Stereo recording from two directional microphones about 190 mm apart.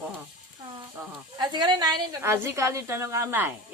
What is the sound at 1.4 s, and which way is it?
A woman's voice, 25° right (ahead or behind).